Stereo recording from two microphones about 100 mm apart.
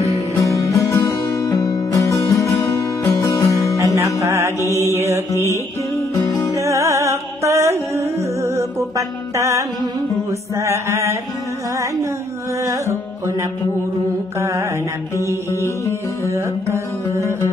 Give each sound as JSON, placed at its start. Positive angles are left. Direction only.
{"t": 0.3, "sound": "music", "side_deg": 20}
{"t": 1.4, "sound": "music", "side_deg": 40}
{"t": 3.7, "sound": "music", "side_deg": -30}
{"t": 5.3, "sound": "music", "side_deg": 30}
{"t": 6.5, "sound": "music", "side_deg": -30}
{"t": 12.6, "sound": "music", "side_deg": -30}
{"t": 15.5, "sound": "music", "side_deg": 30}
{"t": 16.7, "sound": "music", "side_deg": -25}